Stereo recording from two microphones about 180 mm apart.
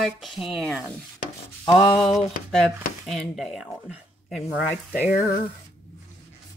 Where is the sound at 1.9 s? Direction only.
Centre (ahead or behind).